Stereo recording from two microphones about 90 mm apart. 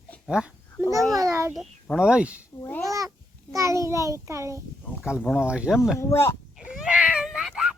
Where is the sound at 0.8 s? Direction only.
35° right (ahead or behind).